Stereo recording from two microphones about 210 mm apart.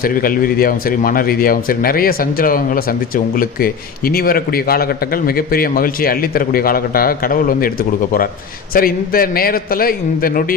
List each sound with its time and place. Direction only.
0.0 s a man's voice: 45° left (ahead or behind)
8.7 s a man's voice: 45° left (ahead or behind)